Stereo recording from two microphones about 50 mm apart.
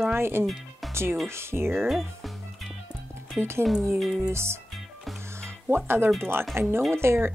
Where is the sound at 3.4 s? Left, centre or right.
Right.